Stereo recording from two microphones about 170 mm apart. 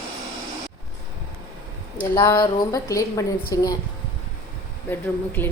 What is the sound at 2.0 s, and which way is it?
A woman's voice, 15° left (ahead or behind).